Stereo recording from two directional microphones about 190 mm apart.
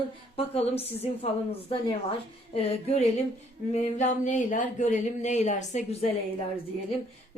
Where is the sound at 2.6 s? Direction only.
35° left (ahead or behind).